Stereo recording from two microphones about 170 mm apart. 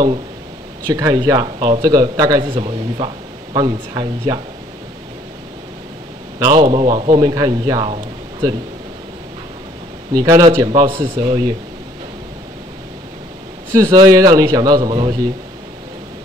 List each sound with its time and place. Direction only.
0.8 s a man's voice: 25° right (ahead or behind)
6.4 s a man's voice: 30° right (ahead or behind)
7.9 s a sound: 25° right (ahead or behind)
10.1 s a man's voice: 25° right (ahead or behind)
13.7 s a man's voice: 20° right (ahead or behind)